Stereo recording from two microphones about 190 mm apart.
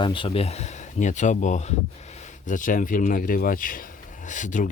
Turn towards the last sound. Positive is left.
turn(degrees=40)  # may be behind; listen again after turning